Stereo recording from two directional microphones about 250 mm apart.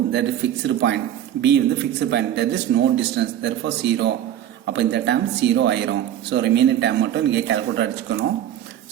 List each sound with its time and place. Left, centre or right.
0.1 s speech: right